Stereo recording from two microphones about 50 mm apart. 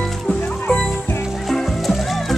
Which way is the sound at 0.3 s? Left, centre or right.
Centre.